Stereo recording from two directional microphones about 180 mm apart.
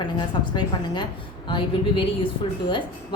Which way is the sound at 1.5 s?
30° left (ahead or behind).